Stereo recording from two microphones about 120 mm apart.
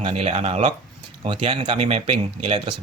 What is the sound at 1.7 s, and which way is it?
Speech, 60° right (ahead or behind).